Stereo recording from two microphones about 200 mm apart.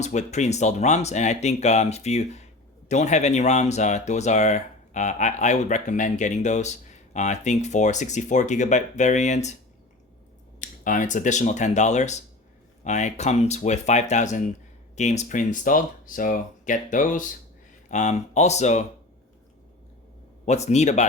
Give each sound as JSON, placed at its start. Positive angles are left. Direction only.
{"t": 0.0, "sound": "speech", "side_deg": 35}
{"t": 10.6, "sound": "speech", "side_deg": 40}
{"t": 20.4, "sound": "speech", "side_deg": 35}